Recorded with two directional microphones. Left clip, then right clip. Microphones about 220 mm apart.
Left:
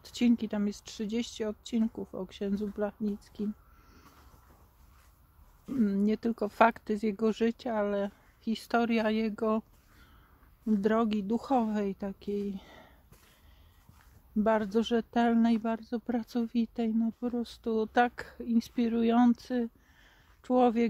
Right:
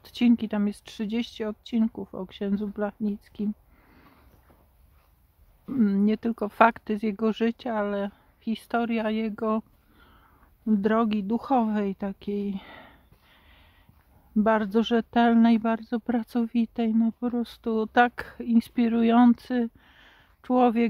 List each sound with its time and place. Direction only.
0.0 s speech: 15° right (ahead or behind)
5.8 s speech: 20° right (ahead or behind)
10.8 s speech: 15° right (ahead or behind)
14.4 s speech: 20° right (ahead or behind)